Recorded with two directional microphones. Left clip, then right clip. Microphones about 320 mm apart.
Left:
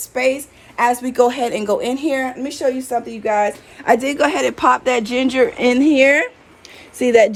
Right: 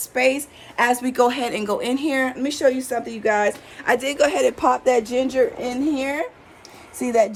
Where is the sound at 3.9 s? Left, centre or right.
Centre.